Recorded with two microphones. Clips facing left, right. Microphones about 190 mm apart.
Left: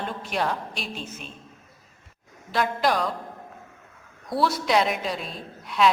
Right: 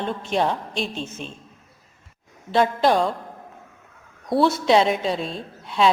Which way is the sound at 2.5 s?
25° right (ahead or behind).